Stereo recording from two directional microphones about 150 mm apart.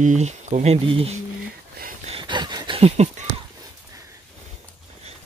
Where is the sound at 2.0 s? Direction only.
35° right (ahead or behind).